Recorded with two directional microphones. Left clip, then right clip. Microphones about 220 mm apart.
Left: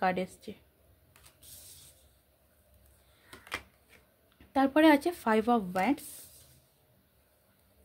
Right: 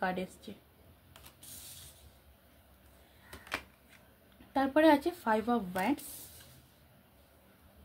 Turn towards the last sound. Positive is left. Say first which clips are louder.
# left 4 dB
turn(degrees=50)  # may be behind; listen again after turning